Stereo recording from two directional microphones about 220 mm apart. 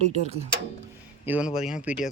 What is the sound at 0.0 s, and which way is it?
Speech, 30° right (ahead or behind).